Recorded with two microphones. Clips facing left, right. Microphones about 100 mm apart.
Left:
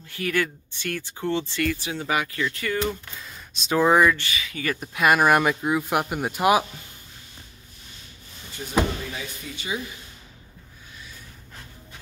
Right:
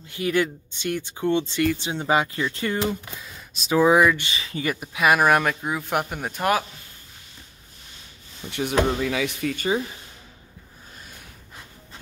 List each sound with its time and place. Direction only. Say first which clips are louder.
0.1 s speech: right 3 dB; 20° right (ahead or behind)
2.9 s speech: right 2 dB; centre (ahead or behind)
4.2 s speech: right 1 dB; 30° right (ahead or behind)
4.7 s speech: even; centre (ahead or behind)
8.5 s speech: right 10 dB; 70° right (ahead or behind)
9.0 s speech: right 10 dB; 90° right
9.6 s speech: right 6 dB; 45° right (ahead or behind)
11.0 s a sound: left 1 dB; 50° right (ahead or behind)